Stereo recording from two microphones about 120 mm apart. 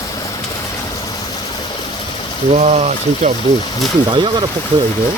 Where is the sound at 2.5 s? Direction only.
70° right (ahead or behind).